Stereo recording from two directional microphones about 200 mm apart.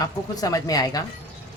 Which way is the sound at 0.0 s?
20° left (ahead or behind).